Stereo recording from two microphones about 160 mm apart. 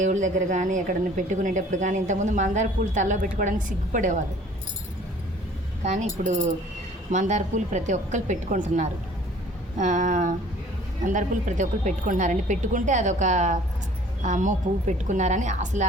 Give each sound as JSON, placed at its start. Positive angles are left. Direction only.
{"t": 0.0, "sound": "speech", "side_deg": -50}
{"t": 5.8, "sound": "speech", "side_deg": -45}